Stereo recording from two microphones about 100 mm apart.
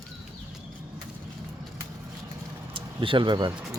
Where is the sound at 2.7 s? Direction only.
55° right (ahead or behind).